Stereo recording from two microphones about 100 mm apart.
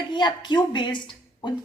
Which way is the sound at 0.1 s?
50° left (ahead or behind).